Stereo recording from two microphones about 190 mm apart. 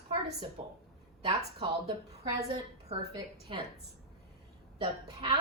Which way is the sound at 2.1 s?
35° right (ahead or behind).